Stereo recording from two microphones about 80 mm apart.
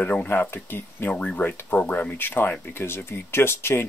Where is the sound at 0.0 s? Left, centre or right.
Left.